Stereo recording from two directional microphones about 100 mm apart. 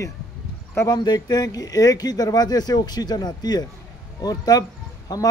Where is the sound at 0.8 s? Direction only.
45° left (ahead or behind).